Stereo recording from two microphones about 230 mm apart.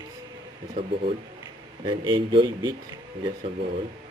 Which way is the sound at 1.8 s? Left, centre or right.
Centre.